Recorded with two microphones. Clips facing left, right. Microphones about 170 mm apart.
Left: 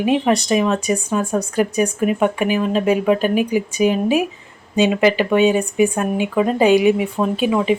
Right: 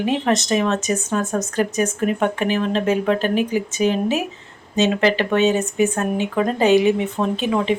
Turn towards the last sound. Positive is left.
turn(degrees=10)  # may be behind; listen again after turning